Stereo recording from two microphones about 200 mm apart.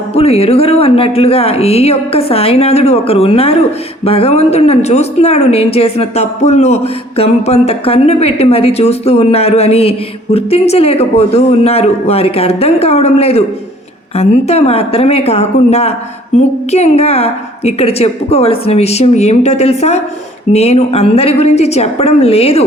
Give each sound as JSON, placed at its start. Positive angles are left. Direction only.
{"t": 0.1, "sound": "a woman's voice", "side_deg": 30}